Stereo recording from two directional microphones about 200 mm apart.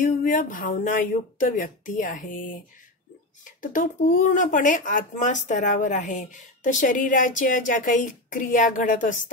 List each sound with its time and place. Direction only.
0.0 s speech: 40° left (ahead or behind)
3.4 s speech: 40° left (ahead or behind)